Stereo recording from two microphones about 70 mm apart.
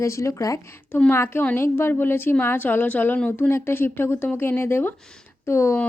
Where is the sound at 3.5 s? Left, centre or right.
Left.